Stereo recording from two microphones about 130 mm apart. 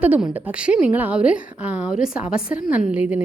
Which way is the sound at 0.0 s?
10° right (ahead or behind).